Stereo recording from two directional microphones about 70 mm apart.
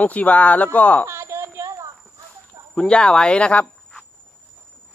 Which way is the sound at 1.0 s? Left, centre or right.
Right.